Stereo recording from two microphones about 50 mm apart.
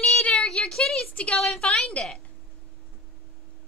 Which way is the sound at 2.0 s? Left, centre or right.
Left.